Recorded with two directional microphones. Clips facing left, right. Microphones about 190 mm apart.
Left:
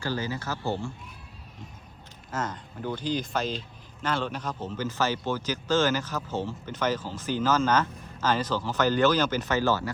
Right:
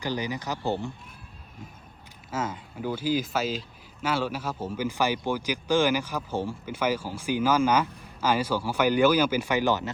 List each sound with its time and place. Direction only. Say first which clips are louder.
0.0 s speech: right 1 dB; 15° right (ahead or behind)
2.3 s speech: right 1 dB; 5° right (ahead or behind)